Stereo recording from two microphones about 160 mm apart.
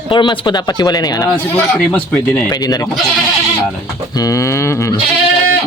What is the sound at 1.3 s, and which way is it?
Speech, 10° left (ahead or behind).